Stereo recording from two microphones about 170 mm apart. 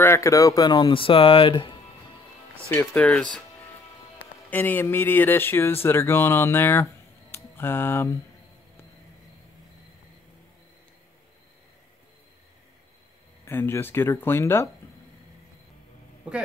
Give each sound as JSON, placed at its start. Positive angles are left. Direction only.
{"t": 0.0, "sound": "speech", "side_deg": 15}
{"t": 2.7, "sound": "speech", "side_deg": 10}
{"t": 4.5, "sound": "speech", "side_deg": 10}
{"t": 13.5, "sound": "speech", "side_deg": 15}
{"t": 16.3, "sound": "speech", "side_deg": -5}